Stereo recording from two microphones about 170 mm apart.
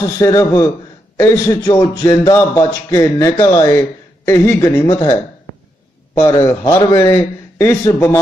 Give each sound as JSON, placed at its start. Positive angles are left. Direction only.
{"t": 0.0, "sound": "a man's voice", "side_deg": 20}